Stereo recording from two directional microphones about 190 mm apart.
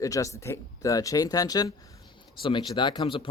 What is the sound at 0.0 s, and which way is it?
Speech, 15° left (ahead or behind).